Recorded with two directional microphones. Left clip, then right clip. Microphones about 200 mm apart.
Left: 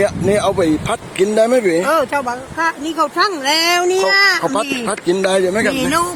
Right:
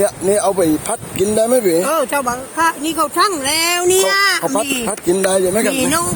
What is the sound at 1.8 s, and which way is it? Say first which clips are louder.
Speech: left 1 dB; 25° right (ahead or behind).